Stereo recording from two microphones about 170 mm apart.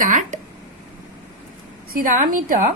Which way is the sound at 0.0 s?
50° right (ahead or behind).